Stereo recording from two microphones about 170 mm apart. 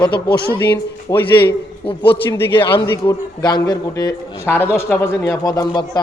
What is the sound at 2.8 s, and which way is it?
A man's voice, 15° left (ahead or behind).